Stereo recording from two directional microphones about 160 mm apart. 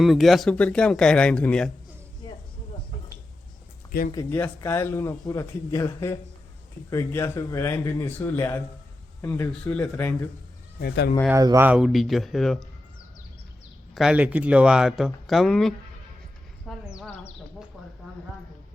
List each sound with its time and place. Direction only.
0.0 s speech: centre (ahead or behind)
4.1 s speech: 15° left (ahead or behind)
10.8 s speech: 85° left
11.3 s speech: 20° right (ahead or behind); by 12.6 s centre (ahead or behind)
13.9 s speech: 5° right (ahead or behind)
16.6 s a sound: 5° right (ahead or behind)